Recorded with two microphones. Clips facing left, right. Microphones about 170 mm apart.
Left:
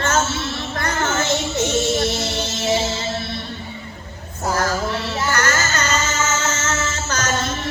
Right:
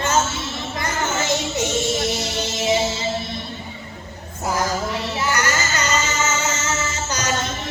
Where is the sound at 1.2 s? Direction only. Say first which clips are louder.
Left 1 dB; 15° right (ahead or behind).